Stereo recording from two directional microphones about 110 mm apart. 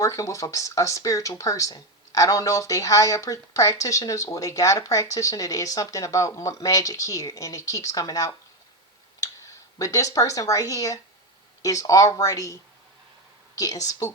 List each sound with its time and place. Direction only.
0.0 s speech: 30° left (ahead or behind)
9.7 s speech: 30° left (ahead or behind)
13.6 s speech: 35° left (ahead or behind)